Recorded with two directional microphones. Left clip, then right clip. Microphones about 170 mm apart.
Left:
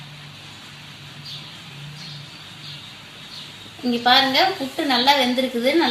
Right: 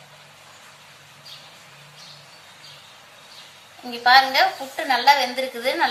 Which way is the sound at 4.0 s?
30° left (ahead or behind).